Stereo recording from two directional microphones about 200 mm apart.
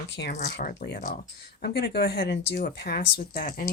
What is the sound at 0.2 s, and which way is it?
Speech, 45° left (ahead or behind).